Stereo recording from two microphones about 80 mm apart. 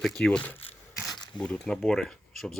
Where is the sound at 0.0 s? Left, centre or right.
Centre.